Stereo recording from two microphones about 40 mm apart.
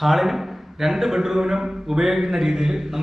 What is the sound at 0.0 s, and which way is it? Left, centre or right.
A man's voice, centre.